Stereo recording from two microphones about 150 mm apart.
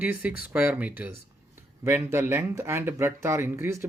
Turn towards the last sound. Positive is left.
turn(degrees=-15)  # may be behind; listen again after turning